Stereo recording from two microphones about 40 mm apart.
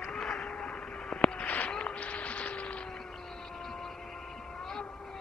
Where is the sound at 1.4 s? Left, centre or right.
Left.